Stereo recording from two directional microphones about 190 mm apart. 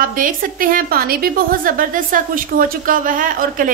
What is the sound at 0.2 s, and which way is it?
A woman's voice, 50° right (ahead or behind).